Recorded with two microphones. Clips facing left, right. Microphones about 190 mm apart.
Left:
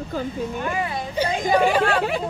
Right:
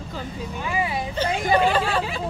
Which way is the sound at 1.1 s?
10° left (ahead or behind).